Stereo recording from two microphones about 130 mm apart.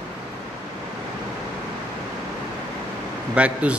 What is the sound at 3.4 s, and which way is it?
Speech, 10° right (ahead or behind).